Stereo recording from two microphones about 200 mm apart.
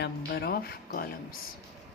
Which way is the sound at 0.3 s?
50° left (ahead or behind).